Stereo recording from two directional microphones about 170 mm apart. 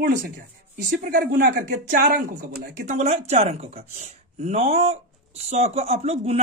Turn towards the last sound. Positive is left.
turn(degrees=-40)  # may be behind; listen again after turning